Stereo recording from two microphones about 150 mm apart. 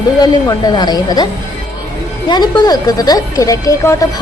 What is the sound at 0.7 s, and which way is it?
Speech, 25° left (ahead or behind).